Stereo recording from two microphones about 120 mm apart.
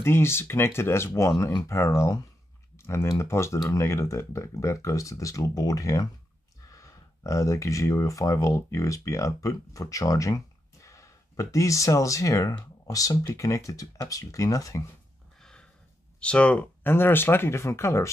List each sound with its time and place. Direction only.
0.0 s speech: 20° left (ahead or behind)
3.1 s speech: 25° left (ahead or behind)
16.2 s speech: 10° left (ahead or behind)